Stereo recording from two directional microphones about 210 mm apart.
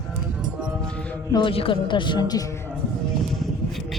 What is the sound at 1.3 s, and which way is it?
A man's voice, 25° left (ahead or behind).